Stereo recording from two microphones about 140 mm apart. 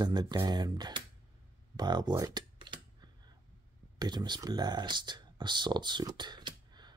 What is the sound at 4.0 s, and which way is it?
Speech, 30° right (ahead or behind).